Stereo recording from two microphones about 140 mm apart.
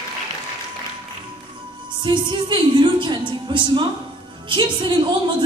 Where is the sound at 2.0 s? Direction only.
35° right (ahead or behind).